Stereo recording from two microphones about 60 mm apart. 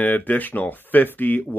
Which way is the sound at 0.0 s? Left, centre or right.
Left.